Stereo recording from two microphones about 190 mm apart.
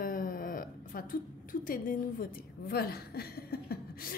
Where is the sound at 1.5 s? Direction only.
45° left (ahead or behind).